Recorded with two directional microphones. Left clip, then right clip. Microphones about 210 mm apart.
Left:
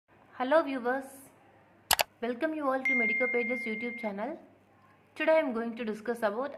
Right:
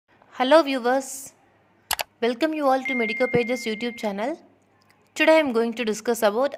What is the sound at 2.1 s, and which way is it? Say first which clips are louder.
A woman's voice: right 9 dB; 55° right (ahead or behind).